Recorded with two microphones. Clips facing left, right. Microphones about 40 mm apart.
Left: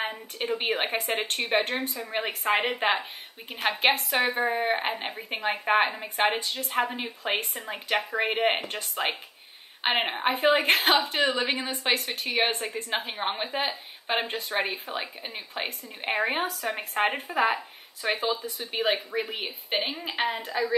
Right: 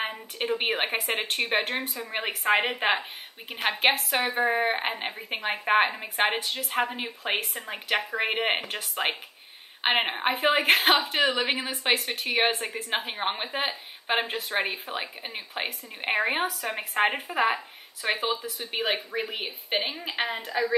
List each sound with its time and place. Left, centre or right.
0.6 s a woman's voice: centre
3.9 s a woman's voice: centre
11.1 s a woman's voice: centre
12.2 s a woman's voice: centre
19.1 s a woman's voice: centre